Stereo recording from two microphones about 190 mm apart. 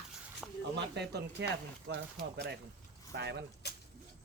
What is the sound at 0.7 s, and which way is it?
Speech, 60° right (ahead or behind).